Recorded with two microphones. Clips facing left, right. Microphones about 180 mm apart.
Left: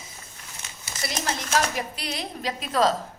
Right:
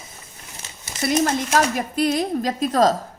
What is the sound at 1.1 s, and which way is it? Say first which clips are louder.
A woman's voice: right 9 dB; 50° right (ahead or behind).